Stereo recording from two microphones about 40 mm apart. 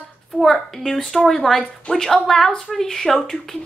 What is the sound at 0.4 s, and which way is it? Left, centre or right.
A woman's voice, centre.